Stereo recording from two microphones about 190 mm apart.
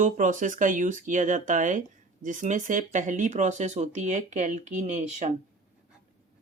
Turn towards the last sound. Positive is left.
turn(degrees=-40)  # may be behind; listen again after turning